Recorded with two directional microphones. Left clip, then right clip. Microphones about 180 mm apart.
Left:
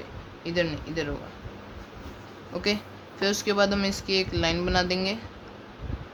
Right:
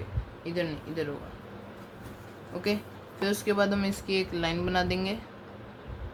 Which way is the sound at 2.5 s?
25° left (ahead or behind).